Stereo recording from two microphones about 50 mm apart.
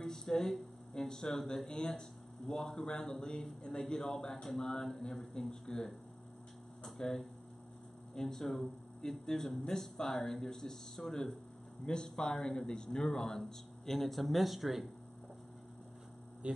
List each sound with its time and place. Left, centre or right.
0.0 s a sound: centre
1.0 s speech: centre
16.4 s speech: right